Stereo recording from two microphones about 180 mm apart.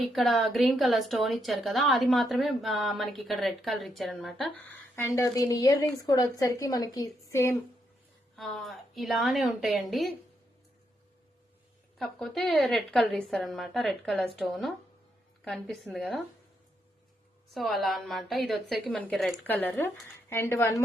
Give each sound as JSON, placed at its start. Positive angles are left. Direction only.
{"t": 0.0, "sound": "a woman's voice", "side_deg": 0}
{"t": 4.9, "sound": "a woman's voice", "side_deg": 15}
{"t": 8.4, "sound": "a woman's voice", "side_deg": 0}
{"t": 11.9, "sound": "a woman's voice", "side_deg": 0}
{"t": 17.5, "sound": "a woman's voice", "side_deg": 0}